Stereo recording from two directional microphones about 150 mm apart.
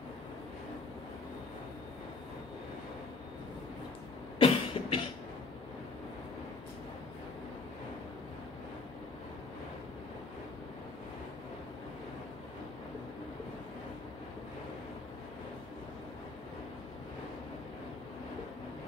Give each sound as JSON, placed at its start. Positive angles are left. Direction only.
{"t": 4.4, "sound": "cough", "side_deg": 35}